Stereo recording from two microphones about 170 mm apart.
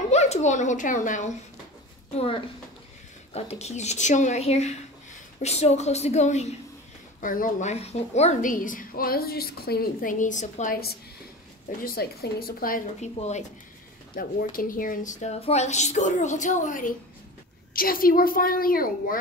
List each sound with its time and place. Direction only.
0.1 s a child's voice: 40° left (ahead or behind)
2.1 s a woman's voice: 35° left (ahead or behind)
7.2 s a woman's voice: 50° left (ahead or behind)
11.8 s a woman's voice: 65° left (ahead or behind)
13.2 s a woman's voice: 40° left (ahead or behind)
14.1 s a woman's voice: 55° left (ahead or behind)